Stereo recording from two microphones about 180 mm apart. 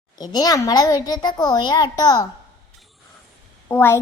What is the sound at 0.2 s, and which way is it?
A child's voice, 20° left (ahead or behind).